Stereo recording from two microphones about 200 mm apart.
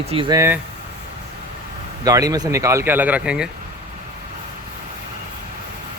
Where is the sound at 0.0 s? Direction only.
25° right (ahead or behind).